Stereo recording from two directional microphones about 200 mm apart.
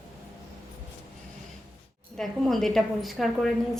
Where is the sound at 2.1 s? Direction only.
Centre (ahead or behind).